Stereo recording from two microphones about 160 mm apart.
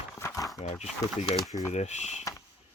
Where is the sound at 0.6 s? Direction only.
45° left (ahead or behind).